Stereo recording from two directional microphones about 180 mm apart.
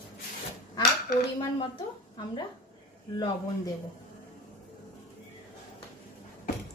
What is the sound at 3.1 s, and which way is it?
Speech, 25° left (ahead or behind).